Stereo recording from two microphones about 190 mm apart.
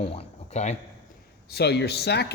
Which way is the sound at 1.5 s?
60° left (ahead or behind).